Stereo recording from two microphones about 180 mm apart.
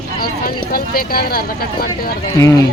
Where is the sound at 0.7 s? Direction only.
55° left (ahead or behind).